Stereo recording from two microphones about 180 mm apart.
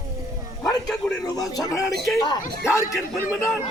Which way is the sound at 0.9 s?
5° left (ahead or behind).